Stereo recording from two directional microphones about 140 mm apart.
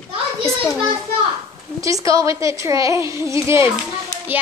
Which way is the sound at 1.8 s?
25° right (ahead or behind).